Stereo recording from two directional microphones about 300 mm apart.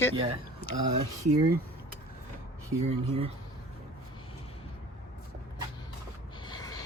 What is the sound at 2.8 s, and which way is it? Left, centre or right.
Speech, right.